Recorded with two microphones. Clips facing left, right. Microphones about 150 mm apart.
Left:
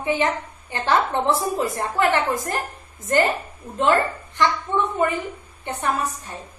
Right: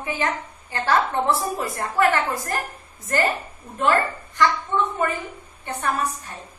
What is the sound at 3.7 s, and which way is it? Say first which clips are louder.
Speech: left 2 dB; 20° left (ahead or behind).